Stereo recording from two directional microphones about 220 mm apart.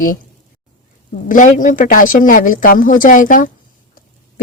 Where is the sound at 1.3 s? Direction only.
35° left (ahead or behind).